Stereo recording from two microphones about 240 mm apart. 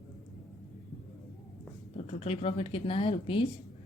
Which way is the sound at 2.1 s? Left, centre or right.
Left.